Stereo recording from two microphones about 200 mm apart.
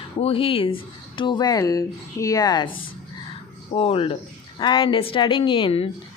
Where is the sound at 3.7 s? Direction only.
30° left (ahead or behind).